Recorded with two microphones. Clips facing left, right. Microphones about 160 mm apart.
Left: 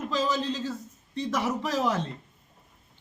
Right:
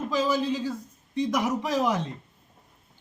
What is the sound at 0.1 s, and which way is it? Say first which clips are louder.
Speech: right 3 dB; 10° right (ahead or behind).